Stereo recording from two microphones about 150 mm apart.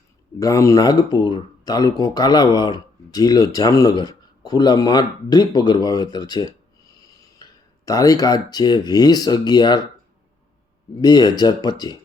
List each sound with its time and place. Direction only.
0.3 s speech: 20° left (ahead or behind)
11.0 s speech: 25° left (ahead or behind)